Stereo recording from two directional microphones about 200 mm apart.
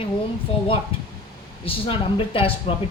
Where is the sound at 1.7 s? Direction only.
25° left (ahead or behind).